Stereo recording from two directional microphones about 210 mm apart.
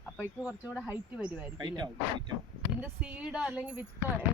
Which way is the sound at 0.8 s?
5° right (ahead or behind).